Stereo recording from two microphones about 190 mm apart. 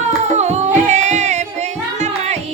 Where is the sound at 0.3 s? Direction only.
35° right (ahead or behind).